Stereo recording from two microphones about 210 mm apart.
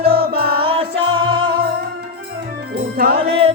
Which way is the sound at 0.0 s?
45° right (ahead or behind).